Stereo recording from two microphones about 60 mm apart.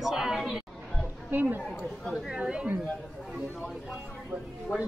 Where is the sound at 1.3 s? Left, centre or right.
Right.